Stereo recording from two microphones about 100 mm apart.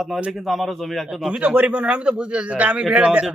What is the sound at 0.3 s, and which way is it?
Speech, centre (ahead or behind).